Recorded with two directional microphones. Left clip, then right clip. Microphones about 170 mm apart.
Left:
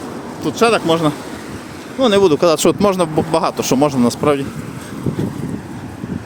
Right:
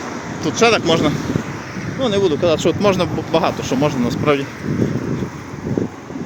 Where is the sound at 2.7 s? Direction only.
35° left (ahead or behind).